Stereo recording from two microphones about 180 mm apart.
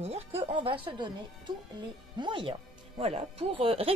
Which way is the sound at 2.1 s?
25° right (ahead or behind).